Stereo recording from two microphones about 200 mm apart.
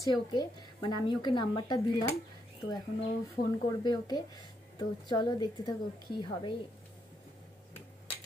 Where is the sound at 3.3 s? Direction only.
20° left (ahead or behind).